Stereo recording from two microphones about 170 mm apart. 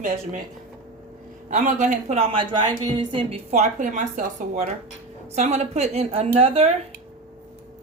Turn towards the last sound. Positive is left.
turn(degrees=-35)  # may be behind; listen again after turning